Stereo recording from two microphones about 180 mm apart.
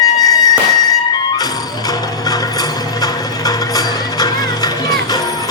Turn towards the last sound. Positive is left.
turn(degrees=20)  # may be behind; listen again after turning